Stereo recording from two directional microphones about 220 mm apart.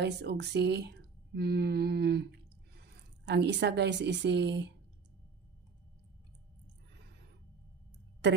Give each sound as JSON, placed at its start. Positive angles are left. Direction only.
{"t": 0.0, "sound": "speech", "side_deg": -50}
{"t": 3.3, "sound": "speech", "side_deg": -50}